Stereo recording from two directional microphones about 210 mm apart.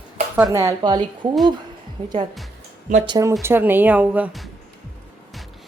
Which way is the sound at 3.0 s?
20° right (ahead or behind).